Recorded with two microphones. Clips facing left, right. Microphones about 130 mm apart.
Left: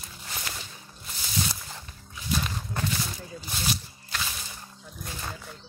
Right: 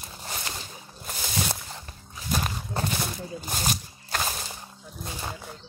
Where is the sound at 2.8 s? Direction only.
30° right (ahead or behind).